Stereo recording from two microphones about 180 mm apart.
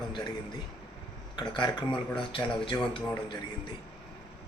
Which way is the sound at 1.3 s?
25° left (ahead or behind).